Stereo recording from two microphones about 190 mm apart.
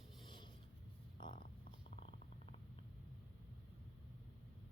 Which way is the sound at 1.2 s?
25° left (ahead or behind).